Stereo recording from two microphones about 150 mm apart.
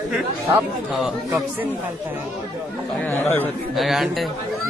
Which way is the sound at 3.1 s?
15° left (ahead or behind).